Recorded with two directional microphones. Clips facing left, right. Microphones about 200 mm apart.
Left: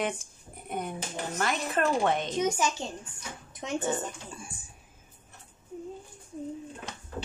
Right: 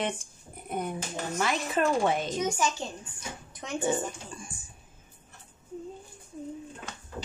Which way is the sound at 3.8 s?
10° right (ahead or behind).